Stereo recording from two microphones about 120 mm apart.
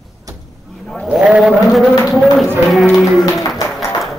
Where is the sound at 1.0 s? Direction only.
10° right (ahead or behind).